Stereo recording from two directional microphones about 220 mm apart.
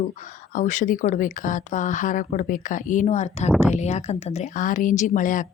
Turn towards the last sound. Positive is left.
turn(degrees=35)  # may be behind; listen again after turning